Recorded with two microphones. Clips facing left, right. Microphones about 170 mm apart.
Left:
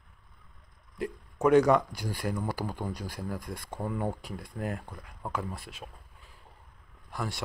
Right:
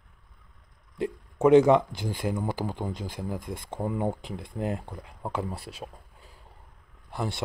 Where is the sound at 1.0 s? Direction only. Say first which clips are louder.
Right 4 dB; 25° right (ahead or behind).